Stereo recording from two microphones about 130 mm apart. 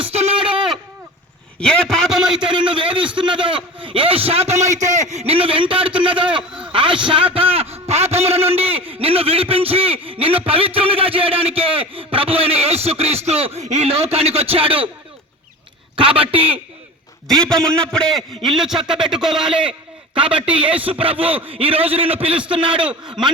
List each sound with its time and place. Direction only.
0.0 s a sound: 50° right (ahead or behind)
1.5 s a sound: 5° left (ahead or behind)
2.5 s a sound: 40° right (ahead or behind)
3.2 s a man's voice: 40° right (ahead or behind)
6.5 s speech: 10° right (ahead or behind)
6.7 s a sound: 40° right (ahead or behind)
8.9 s a man's voice: 45° right (ahead or behind)
17.2 s a man's voice: 5° left (ahead or behind); by 21.6 s 10° right (ahead or behind)
21.6 s a man's voice: 45° right (ahead or behind)
22.3 s speech: 10° right (ahead or behind)
22.5 s a man's voice: 40° right (ahead or behind)
22.8 s speech: 5° right (ahead or behind)